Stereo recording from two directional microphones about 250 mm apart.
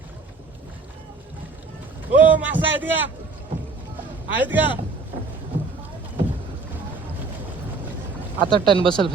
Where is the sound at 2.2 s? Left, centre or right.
Centre.